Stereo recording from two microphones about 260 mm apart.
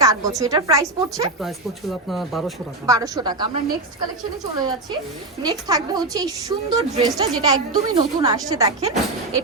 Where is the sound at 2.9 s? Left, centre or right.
Centre.